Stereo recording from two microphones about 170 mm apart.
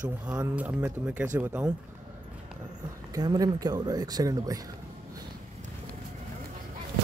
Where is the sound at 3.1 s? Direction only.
20° right (ahead or behind).